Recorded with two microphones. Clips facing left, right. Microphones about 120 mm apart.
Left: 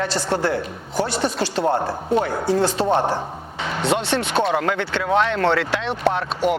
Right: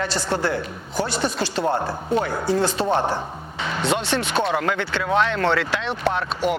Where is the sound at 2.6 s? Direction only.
65° left (ahead or behind).